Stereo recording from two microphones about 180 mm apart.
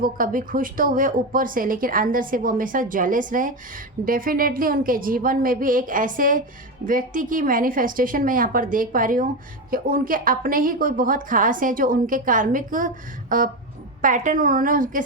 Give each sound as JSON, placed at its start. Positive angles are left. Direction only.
{"t": 0.0, "sound": "a woman's voice", "side_deg": -50}